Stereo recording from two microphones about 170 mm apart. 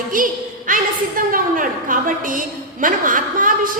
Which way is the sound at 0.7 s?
55° right (ahead or behind).